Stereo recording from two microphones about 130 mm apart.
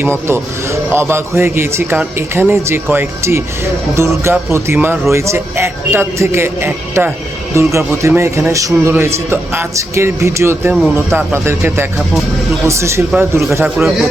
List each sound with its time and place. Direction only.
0.0 s a man's voice: 20° right (ahead or behind)
13.7 s a man's voice: centre (ahead or behind)